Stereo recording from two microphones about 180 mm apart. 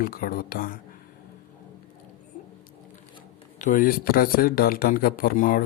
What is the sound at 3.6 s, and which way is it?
Speech, 50° left (ahead or behind).